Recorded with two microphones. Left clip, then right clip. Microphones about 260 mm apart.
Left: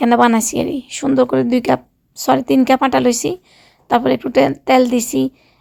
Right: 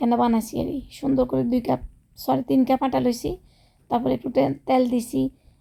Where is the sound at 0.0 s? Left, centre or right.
Left.